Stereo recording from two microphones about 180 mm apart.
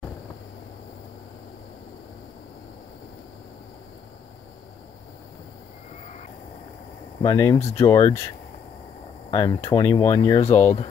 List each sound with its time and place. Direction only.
7.2 s speech: 20° left (ahead or behind)
9.3 s speech: 20° left (ahead or behind)
10.4 s speech: 40° left (ahead or behind)